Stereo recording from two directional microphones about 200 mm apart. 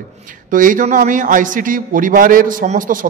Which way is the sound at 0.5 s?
40° right (ahead or behind).